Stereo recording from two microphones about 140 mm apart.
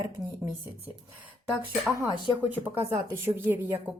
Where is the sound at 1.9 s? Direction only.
15° right (ahead or behind).